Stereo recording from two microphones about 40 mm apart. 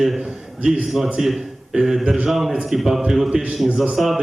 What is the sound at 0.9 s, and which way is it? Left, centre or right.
A man's voice, centre.